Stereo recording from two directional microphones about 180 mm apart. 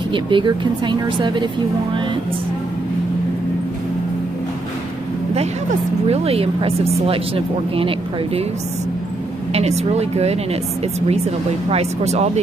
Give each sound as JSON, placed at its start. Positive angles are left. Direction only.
{"t": 0.1, "sound": "speech", "side_deg": -25}
{"t": 6.0, "sound": "speech", "side_deg": -35}
{"t": 9.5, "sound": "speech", "side_deg": -35}